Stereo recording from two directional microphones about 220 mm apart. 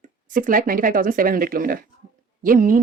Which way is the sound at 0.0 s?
35° right (ahead or behind).